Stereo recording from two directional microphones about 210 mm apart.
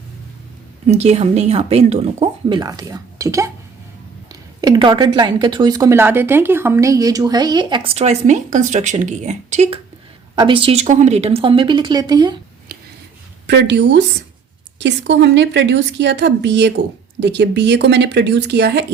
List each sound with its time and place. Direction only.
0.9 s speech: 30° right (ahead or behind)
13.5 s a woman's voice: 55° right (ahead or behind)